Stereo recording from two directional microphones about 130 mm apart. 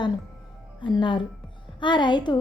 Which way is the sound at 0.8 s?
35° left (ahead or behind).